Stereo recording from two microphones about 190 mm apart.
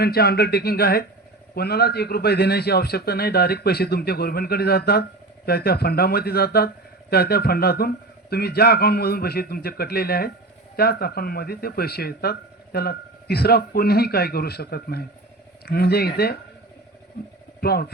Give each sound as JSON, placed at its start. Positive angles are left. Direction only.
{"t": 0.0, "sound": "speech", "side_deg": 55}
{"t": 17.6, "sound": "speech", "side_deg": 55}